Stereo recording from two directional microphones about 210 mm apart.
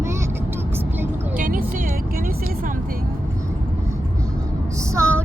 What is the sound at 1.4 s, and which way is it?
Music, 40° right (ahead or behind).